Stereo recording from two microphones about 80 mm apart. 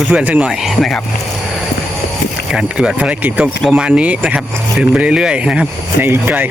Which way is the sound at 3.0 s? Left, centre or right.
Centre.